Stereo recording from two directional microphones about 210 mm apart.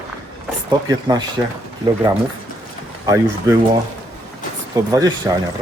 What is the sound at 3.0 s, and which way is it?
Speech, 15° right (ahead or behind).